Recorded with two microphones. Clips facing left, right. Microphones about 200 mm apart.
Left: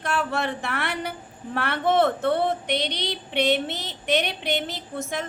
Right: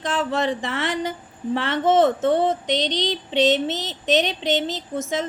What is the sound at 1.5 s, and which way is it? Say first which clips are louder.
Speech: right 3 dB; 20° right (ahead or behind).